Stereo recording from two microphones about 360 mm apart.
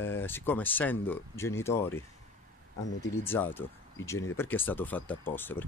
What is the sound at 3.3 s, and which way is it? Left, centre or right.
Speech, centre.